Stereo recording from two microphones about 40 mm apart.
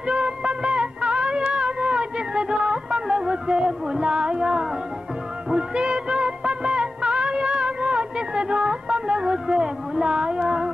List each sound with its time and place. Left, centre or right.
0.0 s music: right
5.5 s music of bollywood: right